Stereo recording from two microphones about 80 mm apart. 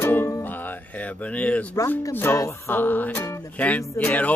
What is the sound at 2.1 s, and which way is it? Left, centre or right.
Speech, left.